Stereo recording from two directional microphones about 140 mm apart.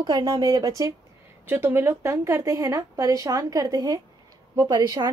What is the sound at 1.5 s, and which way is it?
A woman's voice, 15° right (ahead or behind).